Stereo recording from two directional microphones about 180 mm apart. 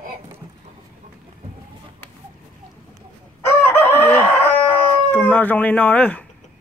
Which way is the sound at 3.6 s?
10° left (ahead or behind).